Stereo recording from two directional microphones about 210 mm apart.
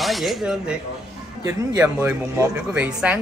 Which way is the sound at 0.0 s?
Centre (ahead or behind).